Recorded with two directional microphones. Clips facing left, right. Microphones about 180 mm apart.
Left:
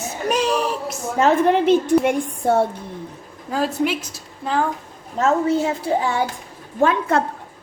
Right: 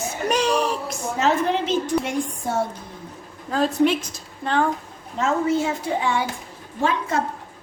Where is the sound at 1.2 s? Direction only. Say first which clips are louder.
Left 5 dB; 50° left (ahead or behind).